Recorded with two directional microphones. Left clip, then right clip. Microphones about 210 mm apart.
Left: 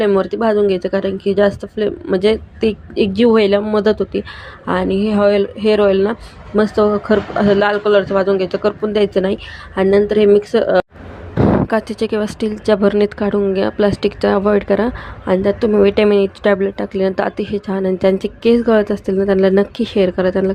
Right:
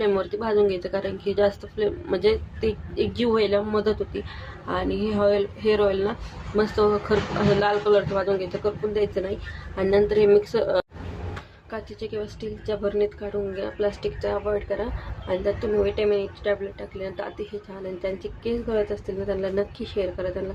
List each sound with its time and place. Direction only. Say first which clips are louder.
0.0 s speech: left 9 dB; 35° left (ahead or behind)
11.7 s a woman's voice: left 15 dB; 50° left (ahead or behind)